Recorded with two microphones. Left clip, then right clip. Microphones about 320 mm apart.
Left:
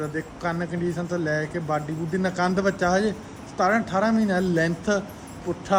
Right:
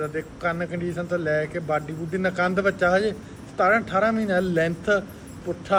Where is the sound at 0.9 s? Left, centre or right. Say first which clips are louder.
Right 4 dB; centre.